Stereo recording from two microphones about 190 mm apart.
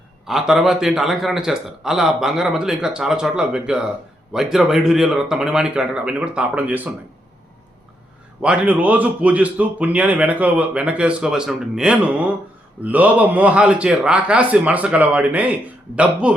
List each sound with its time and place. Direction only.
0.3 s speech: centre (ahead or behind)
8.4 s a man's voice: 5° right (ahead or behind)